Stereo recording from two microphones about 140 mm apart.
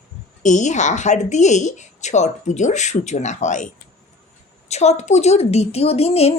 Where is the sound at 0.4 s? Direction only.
60° left (ahead or behind).